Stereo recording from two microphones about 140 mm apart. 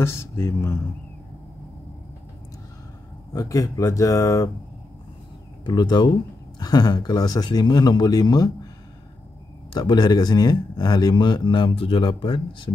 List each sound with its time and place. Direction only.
0.0 s speech: 20° left (ahead or behind)
3.3 s speech: 25° left (ahead or behind)
5.7 s speech: 30° left (ahead or behind)
9.8 s speech: 30° left (ahead or behind)